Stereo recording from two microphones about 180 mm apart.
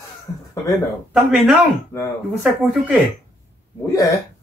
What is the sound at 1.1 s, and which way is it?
Speech, 5° right (ahead or behind).